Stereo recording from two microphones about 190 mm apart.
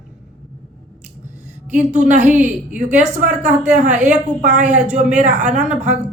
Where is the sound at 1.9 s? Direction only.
40° right (ahead or behind).